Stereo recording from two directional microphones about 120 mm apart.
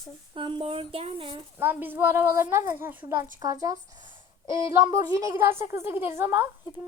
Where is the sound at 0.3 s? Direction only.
45° right (ahead or behind).